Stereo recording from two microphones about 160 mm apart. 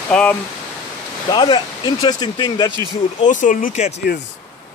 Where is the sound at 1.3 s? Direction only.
30° left (ahead or behind).